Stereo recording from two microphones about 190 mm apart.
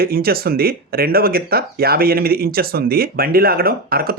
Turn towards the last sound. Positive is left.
turn(degrees=-50)  # may be behind; listen again after turning